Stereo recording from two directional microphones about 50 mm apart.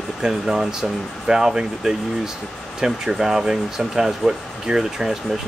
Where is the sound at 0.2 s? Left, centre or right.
Centre.